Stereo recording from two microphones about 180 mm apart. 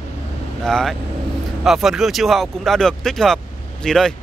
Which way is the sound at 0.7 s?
Centre (ahead or behind).